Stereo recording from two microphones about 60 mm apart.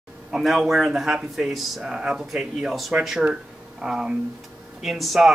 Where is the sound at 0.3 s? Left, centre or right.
Centre.